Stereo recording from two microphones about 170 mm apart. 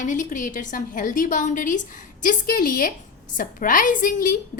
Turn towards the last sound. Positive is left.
turn(degrees=50)  # may be behind; listen again after turning